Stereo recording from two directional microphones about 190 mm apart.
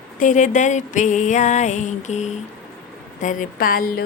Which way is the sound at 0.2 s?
40° left (ahead or behind).